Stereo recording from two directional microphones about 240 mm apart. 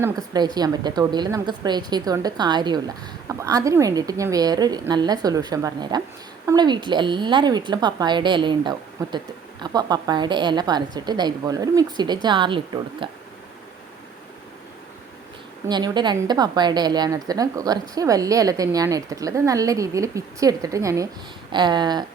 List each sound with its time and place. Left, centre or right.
0.0 s a woman's voice: centre
15.6 s a woman's voice: centre